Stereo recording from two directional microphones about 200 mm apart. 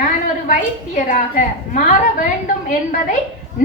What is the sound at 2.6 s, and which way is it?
Speech, 40° left (ahead or behind).